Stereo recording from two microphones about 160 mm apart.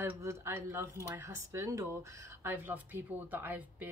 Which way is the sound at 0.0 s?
15° right (ahead or behind).